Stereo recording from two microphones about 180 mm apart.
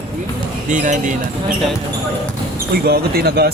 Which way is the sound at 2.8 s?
60° right (ahead or behind).